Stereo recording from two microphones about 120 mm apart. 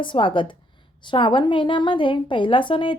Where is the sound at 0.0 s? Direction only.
45° left (ahead or behind).